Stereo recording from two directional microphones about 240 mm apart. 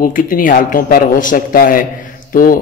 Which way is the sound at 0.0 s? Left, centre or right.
Left.